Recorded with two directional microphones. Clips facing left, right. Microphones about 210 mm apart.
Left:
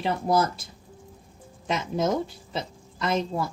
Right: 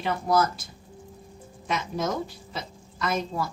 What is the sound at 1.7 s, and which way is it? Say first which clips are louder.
A woman's voice: left 3 dB; 25° left (ahead or behind).